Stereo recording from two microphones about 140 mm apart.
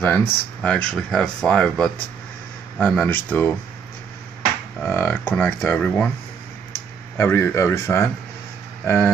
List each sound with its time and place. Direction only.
0.0 s speech: 15° left (ahead or behind)
2.9 s speech: 10° left (ahead or behind)
4.8 s speech: 15° left (ahead or behind)
7.2 s speech: 20° left (ahead or behind)